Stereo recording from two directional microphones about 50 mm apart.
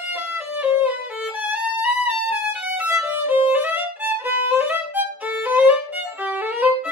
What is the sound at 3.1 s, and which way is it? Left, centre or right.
Violin, right.